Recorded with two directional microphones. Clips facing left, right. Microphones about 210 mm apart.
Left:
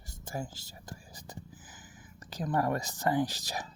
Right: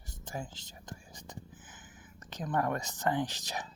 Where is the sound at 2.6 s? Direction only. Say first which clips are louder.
Left 1 dB; 35° left (ahead or behind).